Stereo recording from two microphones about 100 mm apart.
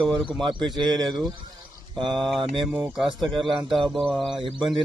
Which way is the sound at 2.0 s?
50° right (ahead or behind).